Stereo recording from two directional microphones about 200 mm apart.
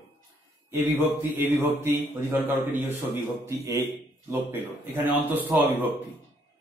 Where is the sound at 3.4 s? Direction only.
15° right (ahead or behind).